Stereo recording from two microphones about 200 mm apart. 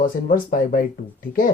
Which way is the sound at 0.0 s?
45° left (ahead or behind).